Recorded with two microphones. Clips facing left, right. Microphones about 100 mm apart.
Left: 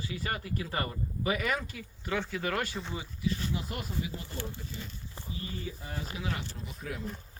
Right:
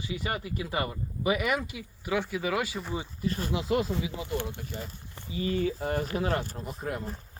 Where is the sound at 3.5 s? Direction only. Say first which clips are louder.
Right 9 dB; 90° right.